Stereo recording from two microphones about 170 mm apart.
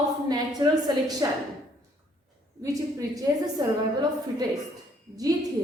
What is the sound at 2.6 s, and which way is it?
A woman's voice, 20° right (ahead or behind).